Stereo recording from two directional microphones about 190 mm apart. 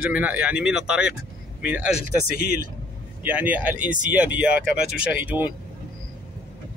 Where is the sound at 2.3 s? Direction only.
55° left (ahead or behind).